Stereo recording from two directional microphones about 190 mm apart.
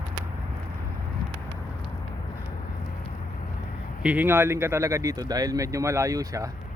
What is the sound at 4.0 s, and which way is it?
Speech, 5° right (ahead or behind).